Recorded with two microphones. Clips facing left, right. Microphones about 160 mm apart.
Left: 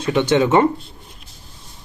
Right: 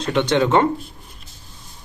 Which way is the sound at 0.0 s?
10° left (ahead or behind).